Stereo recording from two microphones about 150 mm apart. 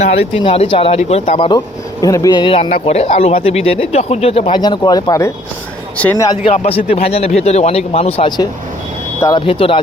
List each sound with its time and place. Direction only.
0.0 s speech: 40° left (ahead or behind)
1.5 s speech: 25° left (ahead or behind); by 4.6 s 40° left (ahead or behind)
4.6 s speech: 25° left (ahead or behind)
6.4 s speech: 40° left (ahead or behind)
9.2 s speech: 30° left (ahead or behind)